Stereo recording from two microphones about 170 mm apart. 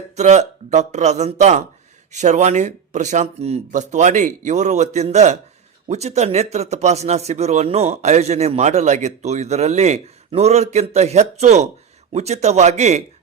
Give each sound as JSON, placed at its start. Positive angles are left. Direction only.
{"t": 0.2, "sound": "speech", "side_deg": -45}